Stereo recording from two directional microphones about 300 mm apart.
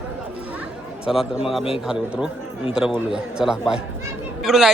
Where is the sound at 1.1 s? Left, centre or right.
Centre.